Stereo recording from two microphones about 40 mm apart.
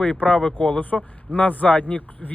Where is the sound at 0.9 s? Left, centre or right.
Centre.